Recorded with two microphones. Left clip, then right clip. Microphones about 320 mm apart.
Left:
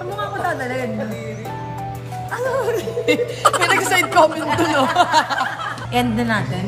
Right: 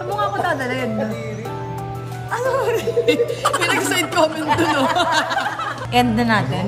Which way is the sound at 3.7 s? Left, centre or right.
Left.